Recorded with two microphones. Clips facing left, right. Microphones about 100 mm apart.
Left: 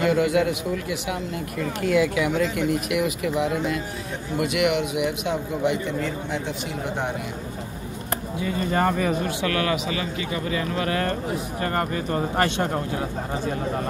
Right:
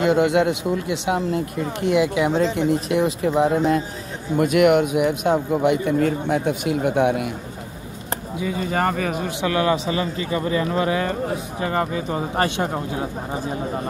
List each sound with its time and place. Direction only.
0.0 s a man's voice: 25° right (ahead or behind); by 7.2 s 65° right (ahead or behind)
8.6 s speech: centre (ahead or behind)
9.4 s a man's voice: 25° right (ahead or behind)
11.6 s speech: 10° right (ahead or behind)